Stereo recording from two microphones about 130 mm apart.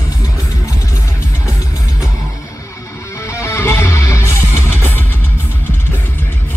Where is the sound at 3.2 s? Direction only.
20° left (ahead or behind).